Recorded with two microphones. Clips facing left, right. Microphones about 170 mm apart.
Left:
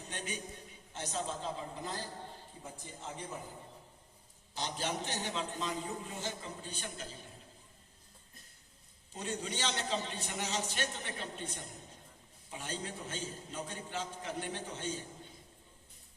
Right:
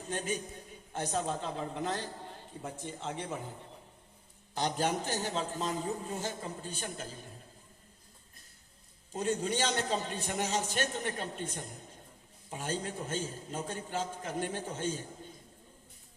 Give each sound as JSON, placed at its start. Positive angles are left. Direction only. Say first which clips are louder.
{"t": 0.1, "sound": "a man's voice", "louder": "right 8 dB", "side_deg": -40}
{"t": 0.9, "sound": "a woman's voice", "louder": "right 5 dB", "side_deg": -55}
{"t": 2.6, "sound": "a man's voice", "louder": "right 8 dB", "side_deg": -85}
{"t": 4.5, "sound": "a man's voice", "louder": "right 6 dB", "side_deg": -50}
{"t": 9.1, "sound": "a man's voice", "louder": "right 7 dB", "side_deg": -45}
{"t": 12.5, "sound": "a man's voice", "louder": "right 5 dB", "side_deg": -45}